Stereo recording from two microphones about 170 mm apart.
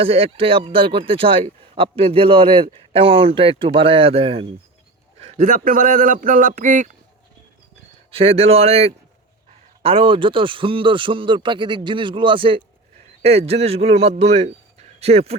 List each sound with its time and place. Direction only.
0.0 s speech: 35° right (ahead or behind)
5.2 s a man's voice: 50° right (ahead or behind)
8.1 s a man's voice: 35° right (ahead or behind)